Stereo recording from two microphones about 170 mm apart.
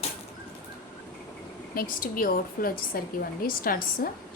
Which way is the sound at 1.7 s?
55° left (ahead or behind).